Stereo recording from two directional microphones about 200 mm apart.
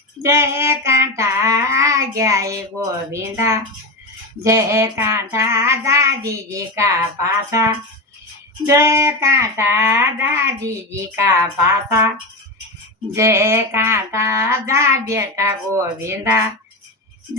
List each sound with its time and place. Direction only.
0.2 s child singing: 15° right (ahead or behind)
13.1 s child singing: 15° right (ahead or behind)